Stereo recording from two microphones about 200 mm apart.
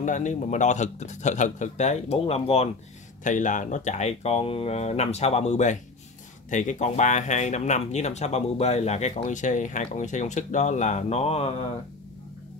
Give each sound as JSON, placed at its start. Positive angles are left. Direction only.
{"t": 0.0, "sound": "speech", "side_deg": 35}